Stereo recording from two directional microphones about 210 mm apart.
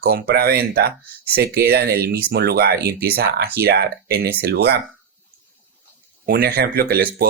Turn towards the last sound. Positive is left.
turn(degrees=-45)  # may be behind; listen again after turning